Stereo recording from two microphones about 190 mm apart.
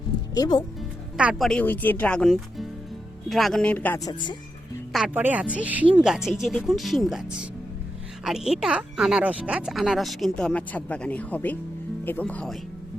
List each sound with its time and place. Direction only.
0.3 s speech: 20° left (ahead or behind)
0.8 s speech: 5° right (ahead or behind); by 4.1 s 10° left (ahead or behind)
4.1 s speech: 25° left (ahead or behind)
4.9 s speech: centre (ahead or behind)